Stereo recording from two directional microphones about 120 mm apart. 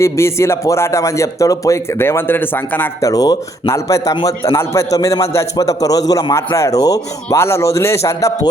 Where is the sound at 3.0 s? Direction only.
30° left (ahead or behind).